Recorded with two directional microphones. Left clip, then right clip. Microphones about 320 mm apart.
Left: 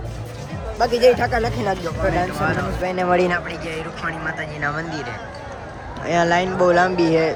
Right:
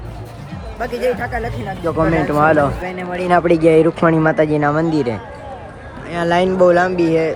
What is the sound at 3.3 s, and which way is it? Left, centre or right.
Speech, centre.